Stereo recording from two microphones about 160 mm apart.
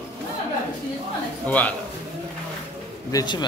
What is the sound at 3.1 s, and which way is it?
Speech, 30° left (ahead or behind).